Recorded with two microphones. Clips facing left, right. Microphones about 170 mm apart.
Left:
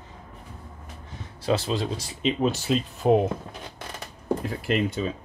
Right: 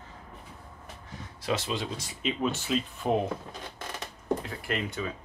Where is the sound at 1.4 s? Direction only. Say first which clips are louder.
Left 6 dB; 35° left (ahead or behind).